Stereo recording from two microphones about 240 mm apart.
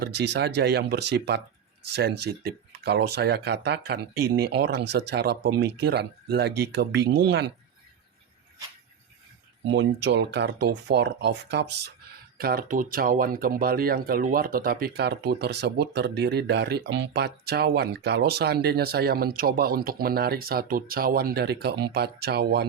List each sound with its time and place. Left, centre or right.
0.0 s speech: right
9.6 s speech: right